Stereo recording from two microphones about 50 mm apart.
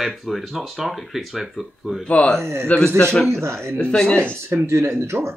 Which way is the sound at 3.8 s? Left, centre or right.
Left.